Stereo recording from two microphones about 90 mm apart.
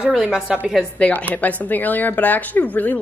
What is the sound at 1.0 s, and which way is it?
A woman's voice, 20° left (ahead or behind).